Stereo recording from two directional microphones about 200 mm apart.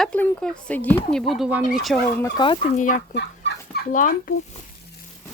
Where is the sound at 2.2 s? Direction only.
25° left (ahead or behind).